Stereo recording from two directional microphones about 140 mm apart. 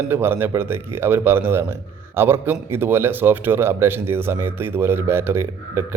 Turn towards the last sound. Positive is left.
turn(degrees=-15)  # may be behind; listen again after turning